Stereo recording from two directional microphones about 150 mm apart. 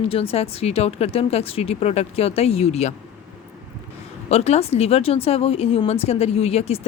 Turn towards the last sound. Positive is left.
turn(degrees=45)  # may be behind; listen again after turning